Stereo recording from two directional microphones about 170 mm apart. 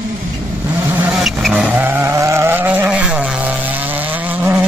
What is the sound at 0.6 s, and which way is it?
Vehicle, 10° right (ahead or behind).